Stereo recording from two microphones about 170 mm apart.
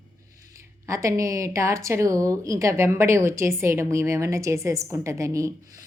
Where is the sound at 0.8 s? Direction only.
20° right (ahead or behind).